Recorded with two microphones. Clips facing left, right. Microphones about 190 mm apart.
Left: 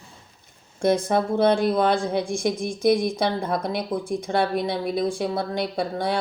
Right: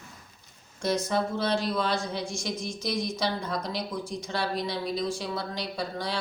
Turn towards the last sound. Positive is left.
turn(degrees=55)  # may be behind; listen again after turning